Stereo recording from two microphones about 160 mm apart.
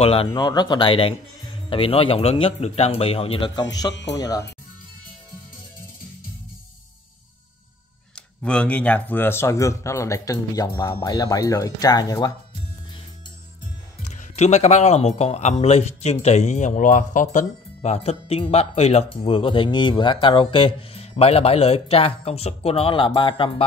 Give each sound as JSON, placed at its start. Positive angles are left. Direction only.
{"t": 0.0, "sound": "speech", "side_deg": 35}
{"t": 0.4, "sound": "a man's voice", "side_deg": 25}
{"t": 3.9, "sound": "speech", "side_deg": 90}
{"t": 4.2, "sound": "a man's voice", "side_deg": 20}
{"t": 8.4, "sound": "a man's voice", "side_deg": 10}
{"t": 14.0, "sound": "speech", "side_deg": 50}